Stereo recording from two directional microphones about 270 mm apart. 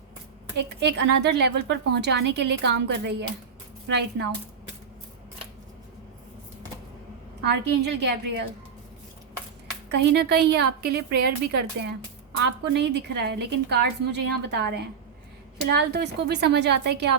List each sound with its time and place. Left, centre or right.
0.5 s a woman's voice: right
7.4 s a woman's voice: right
10.1 s a woman's voice: right
11.1 s speech: right
12.4 s a woman's voice: right